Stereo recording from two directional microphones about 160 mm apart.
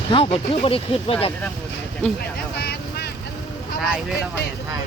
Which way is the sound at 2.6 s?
90° left.